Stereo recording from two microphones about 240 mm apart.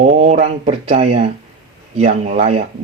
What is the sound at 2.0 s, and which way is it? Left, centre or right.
Speech, right.